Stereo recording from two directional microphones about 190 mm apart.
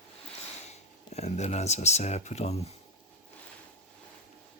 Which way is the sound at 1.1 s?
35° left (ahead or behind).